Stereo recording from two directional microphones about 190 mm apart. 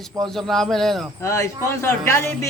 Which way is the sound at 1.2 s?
15° left (ahead or behind).